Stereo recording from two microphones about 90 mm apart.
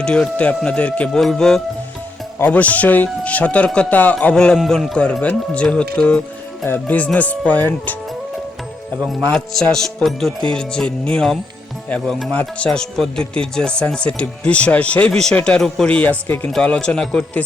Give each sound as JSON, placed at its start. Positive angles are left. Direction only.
{"t": 0.0, "sound": "a man's voice", "side_deg": 10}
{"t": 2.4, "sound": "speech", "side_deg": 15}
{"t": 4.5, "sound": "a man's voice", "side_deg": 0}
{"t": 9.0, "sound": "a man's voice", "side_deg": 5}